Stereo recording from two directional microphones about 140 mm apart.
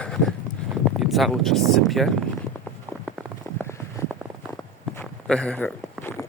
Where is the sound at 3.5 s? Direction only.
20° left (ahead or behind).